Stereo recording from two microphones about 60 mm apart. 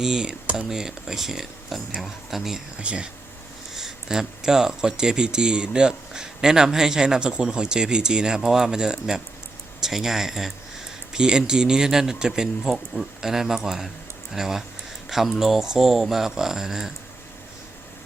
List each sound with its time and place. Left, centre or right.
0.0 s speech: centre
2.8 s speech: centre
3.8 s speech: centre